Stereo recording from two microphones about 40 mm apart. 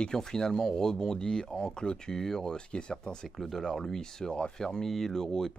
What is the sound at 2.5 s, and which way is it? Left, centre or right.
Speech, left.